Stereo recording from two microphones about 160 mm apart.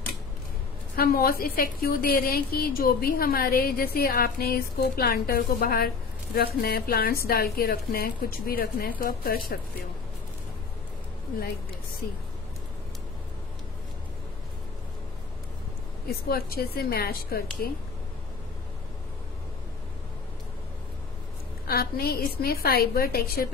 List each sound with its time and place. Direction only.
0.9 s a woman's voice: 65° left (ahead or behind)
16.1 s a woman's voice: 70° left (ahead or behind)
21.6 s a woman's voice: 70° left (ahead or behind)